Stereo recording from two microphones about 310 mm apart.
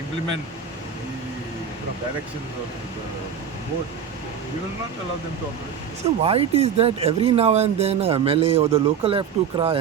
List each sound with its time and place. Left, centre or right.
6.2 s speech: centre